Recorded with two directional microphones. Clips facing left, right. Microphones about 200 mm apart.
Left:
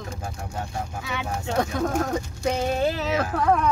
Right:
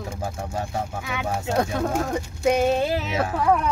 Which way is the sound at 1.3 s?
10° right (ahead or behind).